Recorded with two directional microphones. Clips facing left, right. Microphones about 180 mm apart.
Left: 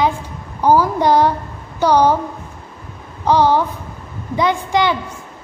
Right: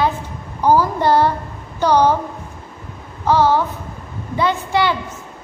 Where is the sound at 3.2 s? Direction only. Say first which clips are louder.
Left 1 dB; 15° left (ahead or behind).